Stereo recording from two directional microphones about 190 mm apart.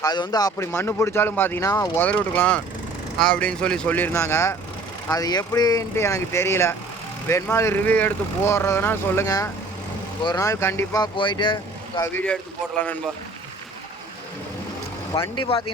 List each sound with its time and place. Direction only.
0.0 s speech: 20° left (ahead or behind)
12.1 s speech: 10° left (ahead or behind)
15.1 s speech: 15° left (ahead or behind)